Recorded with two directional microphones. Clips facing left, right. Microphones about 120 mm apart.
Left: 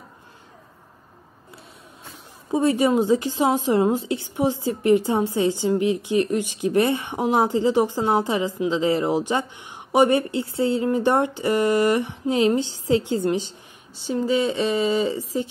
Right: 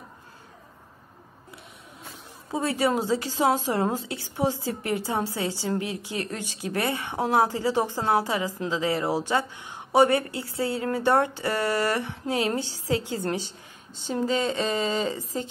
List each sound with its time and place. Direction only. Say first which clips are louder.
2.5 s a woman's voice: left 6 dB; 20° left (ahead or behind)